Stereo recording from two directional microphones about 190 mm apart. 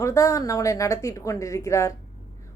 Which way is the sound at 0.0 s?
15° left (ahead or behind).